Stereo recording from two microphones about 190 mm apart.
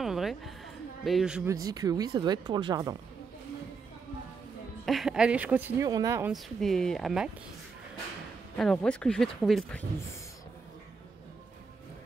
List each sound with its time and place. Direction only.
0.0 s a sound: centre (ahead or behind)
1.0 s speech: centre (ahead or behind)
1.5 s speech: 20° right (ahead or behind)
4.8 s speech: centre (ahead or behind)
6.3 s speech: centre (ahead or behind)
8.5 s speech: 5° left (ahead or behind)